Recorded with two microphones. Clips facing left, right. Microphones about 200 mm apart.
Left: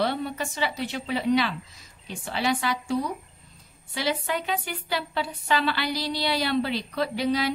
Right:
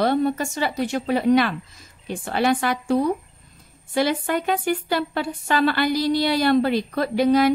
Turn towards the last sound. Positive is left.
turn(degrees=-50)  # may be behind; listen again after turning